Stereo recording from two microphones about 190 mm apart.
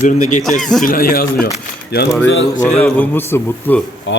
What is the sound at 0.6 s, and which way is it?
Speech, centre (ahead or behind).